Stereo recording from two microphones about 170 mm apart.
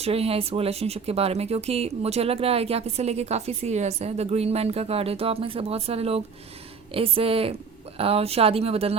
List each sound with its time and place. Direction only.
0.0 s speech: 35° right (ahead or behind)